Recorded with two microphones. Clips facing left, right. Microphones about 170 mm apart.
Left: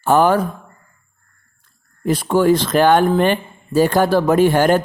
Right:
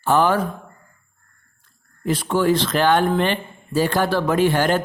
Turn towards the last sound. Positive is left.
turn(degrees=45)  # may be behind; listen again after turning